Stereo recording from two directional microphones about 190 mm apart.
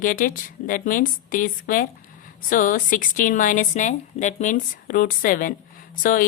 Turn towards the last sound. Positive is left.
turn(degrees=45)  # may be behind; listen again after turning